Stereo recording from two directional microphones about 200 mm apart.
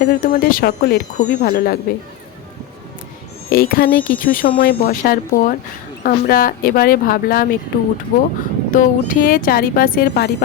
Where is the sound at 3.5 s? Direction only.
50° left (ahead or behind).